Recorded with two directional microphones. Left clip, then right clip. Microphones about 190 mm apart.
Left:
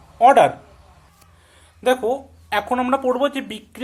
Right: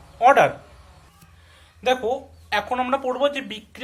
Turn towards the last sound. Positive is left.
turn(degrees=50)  # may be behind; listen again after turning